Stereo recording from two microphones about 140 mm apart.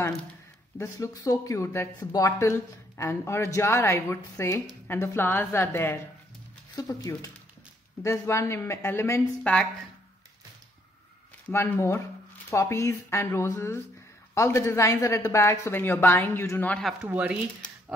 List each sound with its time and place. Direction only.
0.7 s a woman's voice: 20° left (ahead or behind)
11.4 s a woman's voice: 15° left (ahead or behind)
17.0 s speech: 10° right (ahead or behind)